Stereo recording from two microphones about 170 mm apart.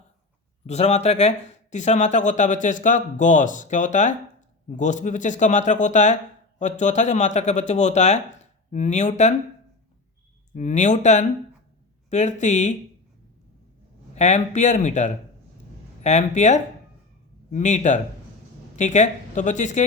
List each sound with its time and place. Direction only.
0.7 s a man's voice: 40° left (ahead or behind)
10.5 s speech: 45° left (ahead or behind)
14.2 s speech: 45° left (ahead or behind)